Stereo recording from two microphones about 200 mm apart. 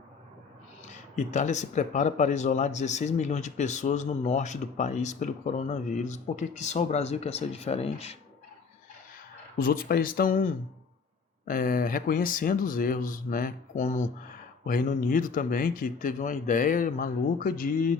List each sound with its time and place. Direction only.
1.1 s speech: 35° left (ahead or behind)
9.6 s speech: 45° left (ahead or behind)